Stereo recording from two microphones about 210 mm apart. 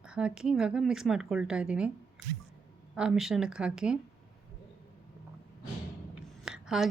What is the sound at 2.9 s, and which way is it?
A woman's voice, centre (ahead or behind).